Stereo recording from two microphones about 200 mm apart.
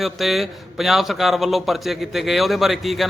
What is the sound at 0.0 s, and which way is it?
A man's voice, centre (ahead or behind).